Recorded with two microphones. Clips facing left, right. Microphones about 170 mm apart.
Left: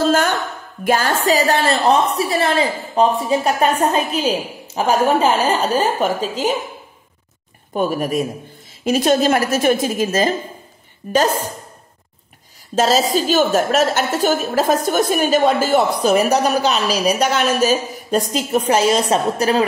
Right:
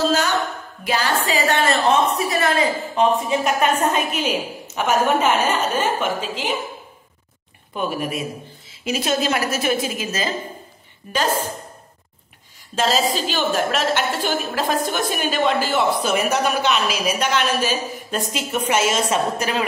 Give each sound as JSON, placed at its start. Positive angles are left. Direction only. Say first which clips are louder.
{"t": 0.0, "sound": "a woman's voice", "louder": "left 3 dB", "side_deg": 50}
{"t": 7.7, "sound": "a woman's voice", "louder": "left 6 dB", "side_deg": 40}
{"t": 11.0, "sound": "a woman's voice", "louder": "left 8 dB", "side_deg": 40}
{"t": 12.7, "sound": "a woman's voice", "louder": "left 4 dB", "side_deg": 40}